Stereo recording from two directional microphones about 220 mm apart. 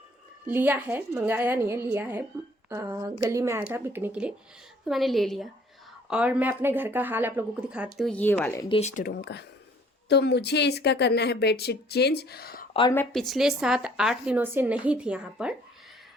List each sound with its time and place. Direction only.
0.4 s a woman's voice: 10° right (ahead or behind); by 8.6 s 10° left (ahead or behind)
8.7 s speech: 35° left (ahead or behind)
12.9 s speech: 5° left (ahead or behind)